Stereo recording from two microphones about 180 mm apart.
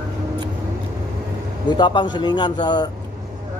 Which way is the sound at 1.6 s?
25° left (ahead or behind).